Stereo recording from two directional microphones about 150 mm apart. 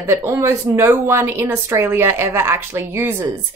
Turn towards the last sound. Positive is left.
turn(degrees=-15)  # may be behind; listen again after turning